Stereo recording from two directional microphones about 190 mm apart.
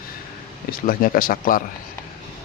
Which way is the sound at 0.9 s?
50° left (ahead or behind).